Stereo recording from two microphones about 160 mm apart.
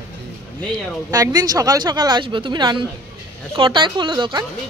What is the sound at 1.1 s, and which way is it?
Speech, 25° right (ahead or behind).